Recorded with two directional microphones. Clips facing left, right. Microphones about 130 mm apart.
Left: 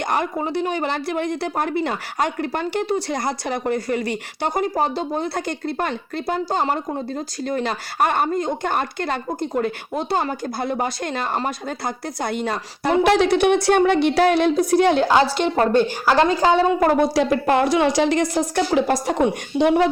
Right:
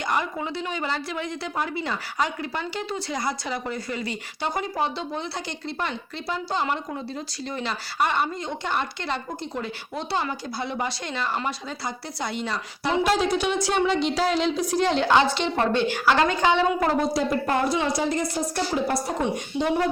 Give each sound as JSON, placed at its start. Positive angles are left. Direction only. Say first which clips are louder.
{"t": 0.0, "sound": "speech", "louder": "left 4 dB", "side_deg": 50}
{"t": 15.0, "sound": "speech", "louder": "left 3 dB", "side_deg": 35}
{"t": 17.0, "sound": "a woman's voice", "louder": "left 5 dB", "side_deg": 90}
{"t": 19.2, "sound": "a woman's voice", "louder": "left 7 dB", "side_deg": 70}